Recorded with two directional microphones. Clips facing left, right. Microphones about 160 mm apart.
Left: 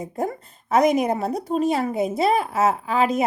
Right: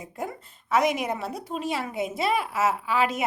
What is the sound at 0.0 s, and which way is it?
A woman's voice, 40° left (ahead or behind).